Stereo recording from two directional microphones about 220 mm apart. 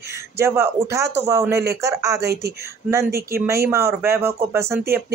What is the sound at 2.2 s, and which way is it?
Speech, 45° right (ahead or behind).